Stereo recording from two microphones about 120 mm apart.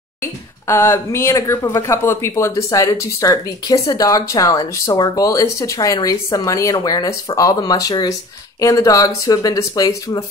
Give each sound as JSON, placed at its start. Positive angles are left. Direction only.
{"t": 0.2, "sound": "speech", "side_deg": 20}